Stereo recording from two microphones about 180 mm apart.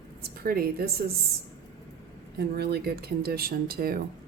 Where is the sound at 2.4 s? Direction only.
60° right (ahead or behind).